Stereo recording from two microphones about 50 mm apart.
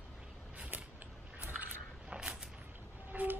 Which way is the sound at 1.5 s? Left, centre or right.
Right.